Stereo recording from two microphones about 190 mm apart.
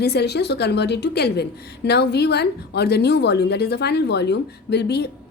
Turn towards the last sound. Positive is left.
turn(degrees=60)  # may be behind; listen again after turning